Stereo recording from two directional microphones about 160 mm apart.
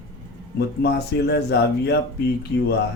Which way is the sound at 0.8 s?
90° left.